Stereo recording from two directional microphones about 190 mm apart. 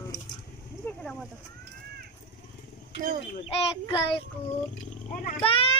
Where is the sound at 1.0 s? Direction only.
5° left (ahead or behind).